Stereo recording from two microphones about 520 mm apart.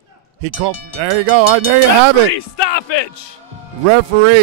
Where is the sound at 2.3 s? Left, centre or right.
Left.